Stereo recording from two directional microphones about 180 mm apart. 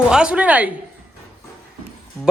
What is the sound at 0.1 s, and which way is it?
Speech, 5° right (ahead or behind).